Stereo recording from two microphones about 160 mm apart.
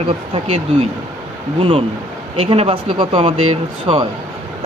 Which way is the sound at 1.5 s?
40° right (ahead or behind).